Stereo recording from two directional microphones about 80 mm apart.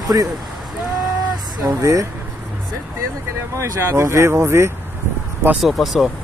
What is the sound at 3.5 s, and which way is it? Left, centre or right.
Speech, right.